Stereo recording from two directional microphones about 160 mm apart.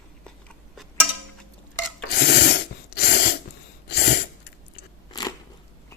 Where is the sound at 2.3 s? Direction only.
90° left.